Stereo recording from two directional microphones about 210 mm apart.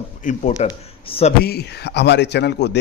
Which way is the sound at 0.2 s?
40° left (ahead or behind).